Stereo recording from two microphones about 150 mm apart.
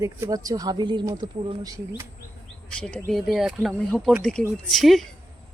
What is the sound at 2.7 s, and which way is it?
Speech, 5° left (ahead or behind).